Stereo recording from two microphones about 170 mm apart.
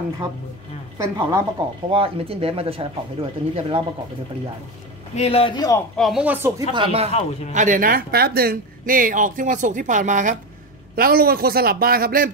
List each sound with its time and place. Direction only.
0.9 s a woman's voice: 20° right (ahead or behind)
1.9 s speech: 35° right (ahead or behind)
5.1 s a man's voice: 35° left (ahead or behind)
5.9 s speech: centre (ahead or behind)
6.7 s speech: 35° right (ahead or behind)
7.1 s a man's voice: 40° left (ahead or behind)
7.5 s speech: 50° right (ahead or behind)
11.0 s a man's voice: 60° right (ahead or behind)